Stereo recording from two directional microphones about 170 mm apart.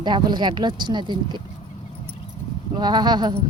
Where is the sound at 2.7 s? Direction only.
25° right (ahead or behind).